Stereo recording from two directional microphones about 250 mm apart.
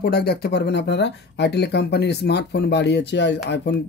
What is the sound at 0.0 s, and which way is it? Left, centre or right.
Speech, left.